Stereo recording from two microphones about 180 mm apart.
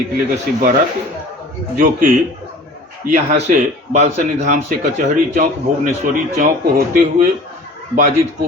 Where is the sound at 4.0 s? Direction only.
40° right (ahead or behind).